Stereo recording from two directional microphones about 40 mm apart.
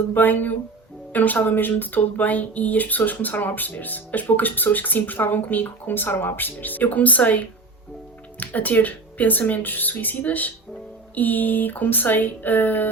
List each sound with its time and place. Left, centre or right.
0.1 s speech: left
5.9 s speech: left